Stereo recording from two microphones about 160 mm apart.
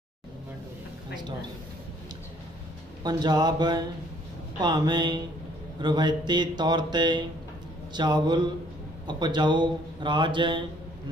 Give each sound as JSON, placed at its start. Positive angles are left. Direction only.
{"t": 3.0, "sound": "speech", "side_deg": -25}